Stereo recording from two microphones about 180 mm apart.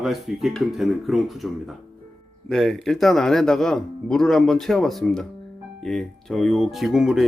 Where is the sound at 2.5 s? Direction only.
5° left (ahead or behind).